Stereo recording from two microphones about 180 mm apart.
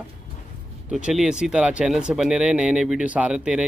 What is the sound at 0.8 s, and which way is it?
Speech, 5° right (ahead or behind).